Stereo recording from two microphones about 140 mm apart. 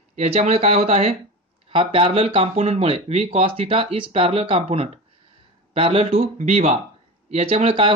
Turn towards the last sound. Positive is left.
turn(degrees=-40)  # may be behind; listen again after turning